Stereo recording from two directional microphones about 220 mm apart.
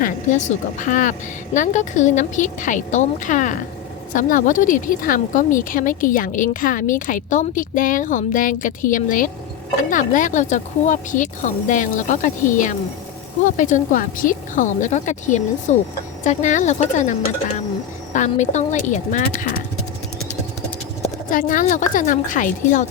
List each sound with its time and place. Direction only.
0.0 s speech: 35° left (ahead or behind)
21.0 s speech: 40° left (ahead or behind)